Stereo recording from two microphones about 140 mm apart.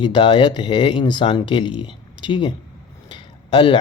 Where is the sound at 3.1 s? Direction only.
35° left (ahead or behind).